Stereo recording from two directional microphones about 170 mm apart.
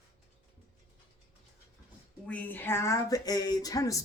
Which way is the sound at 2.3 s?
10° left (ahead or behind).